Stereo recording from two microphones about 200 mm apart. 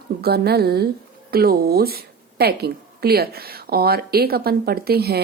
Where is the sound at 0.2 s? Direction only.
50° right (ahead or behind).